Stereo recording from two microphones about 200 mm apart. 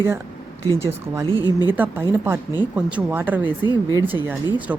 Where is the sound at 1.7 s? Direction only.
10° right (ahead or behind).